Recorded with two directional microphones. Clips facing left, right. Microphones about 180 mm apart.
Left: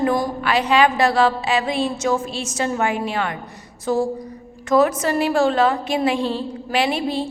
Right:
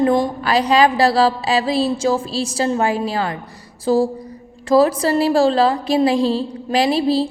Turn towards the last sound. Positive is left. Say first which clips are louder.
# right 5 dB
turn(degrees=-35)  # may be behind; listen again after turning